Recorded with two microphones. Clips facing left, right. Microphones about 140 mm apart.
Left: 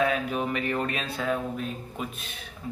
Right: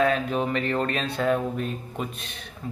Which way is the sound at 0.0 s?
10° left (ahead or behind).